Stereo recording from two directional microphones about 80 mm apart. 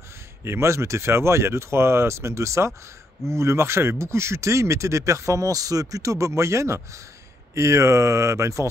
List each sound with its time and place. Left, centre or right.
0.4 s speech: right